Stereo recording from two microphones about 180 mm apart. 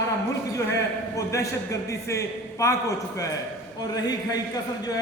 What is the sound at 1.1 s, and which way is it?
A man's voice, 15° left (ahead or behind).